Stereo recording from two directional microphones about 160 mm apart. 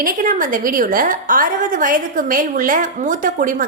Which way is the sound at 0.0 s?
55° right (ahead or behind).